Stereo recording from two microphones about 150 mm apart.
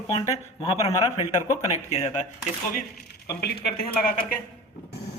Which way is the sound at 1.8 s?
45° left (ahead or behind).